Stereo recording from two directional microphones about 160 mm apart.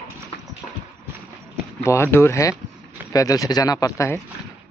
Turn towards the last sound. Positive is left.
turn(degrees=20)  # may be behind; listen again after turning